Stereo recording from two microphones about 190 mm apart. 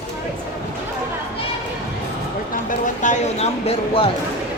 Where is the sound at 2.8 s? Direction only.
40° left (ahead or behind).